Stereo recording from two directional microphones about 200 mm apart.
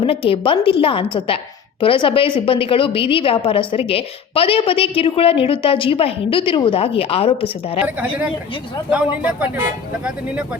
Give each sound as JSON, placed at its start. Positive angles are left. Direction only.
{"t": 0.0, "sound": "a woman's voice", "side_deg": 30}
{"t": 7.9, "sound": "speech", "side_deg": -10}